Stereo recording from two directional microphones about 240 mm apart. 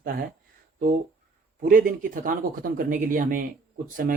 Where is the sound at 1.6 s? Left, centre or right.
Right.